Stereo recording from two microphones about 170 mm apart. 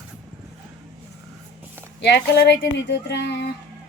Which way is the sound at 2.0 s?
85° left.